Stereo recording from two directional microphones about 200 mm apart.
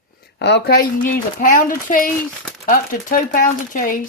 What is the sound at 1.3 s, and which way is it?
Speech, 40° left (ahead or behind).